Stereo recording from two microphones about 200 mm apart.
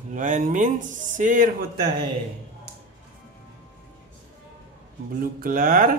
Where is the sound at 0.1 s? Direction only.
40° right (ahead or behind).